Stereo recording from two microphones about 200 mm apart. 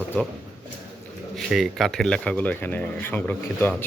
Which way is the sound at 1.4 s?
Centre (ahead or behind).